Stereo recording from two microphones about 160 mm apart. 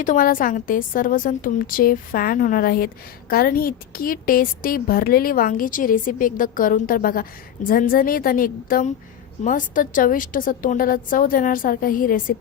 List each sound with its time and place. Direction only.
0.0 s a woman's voice: 55° left (ahead or behind)